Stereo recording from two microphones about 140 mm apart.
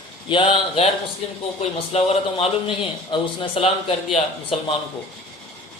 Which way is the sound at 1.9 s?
50° left (ahead or behind).